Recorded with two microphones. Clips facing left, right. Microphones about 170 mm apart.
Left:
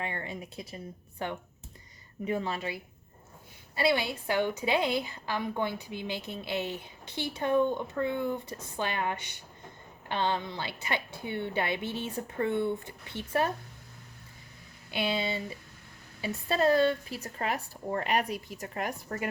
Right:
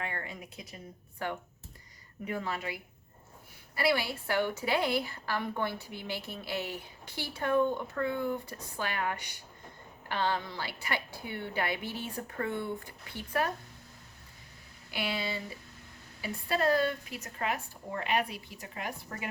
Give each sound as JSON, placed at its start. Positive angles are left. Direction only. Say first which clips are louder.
{"t": 0.0, "sound": "a woman's voice", "louder": "left 3 dB", "side_deg": 25}
{"t": 14.8, "sound": "a sound", "louder": "left 4 dB", "side_deg": 25}
{"t": 16.2, "sound": "speech", "louder": "left 3 dB", "side_deg": 25}